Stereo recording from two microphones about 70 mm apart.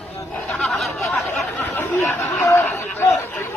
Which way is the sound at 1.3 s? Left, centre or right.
Left.